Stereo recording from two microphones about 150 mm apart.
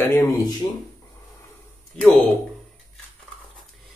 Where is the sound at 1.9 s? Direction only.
5° left (ahead or behind).